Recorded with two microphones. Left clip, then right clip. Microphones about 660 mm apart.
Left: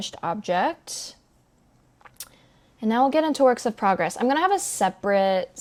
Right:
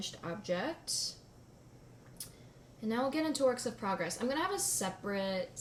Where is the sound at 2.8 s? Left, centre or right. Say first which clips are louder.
Left 14 dB; left.